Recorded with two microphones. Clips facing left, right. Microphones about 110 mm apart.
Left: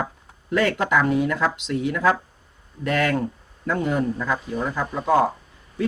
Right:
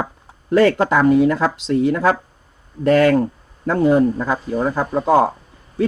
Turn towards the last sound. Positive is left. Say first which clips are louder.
# right 5 dB
turn(degrees=-35)  # may be behind; listen again after turning